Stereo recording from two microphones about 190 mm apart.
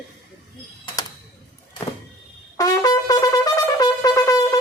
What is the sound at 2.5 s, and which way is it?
Brass instrument, 20° left (ahead or behind).